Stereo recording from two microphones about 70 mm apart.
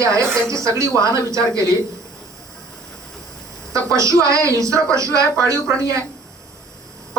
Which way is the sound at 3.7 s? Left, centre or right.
Right.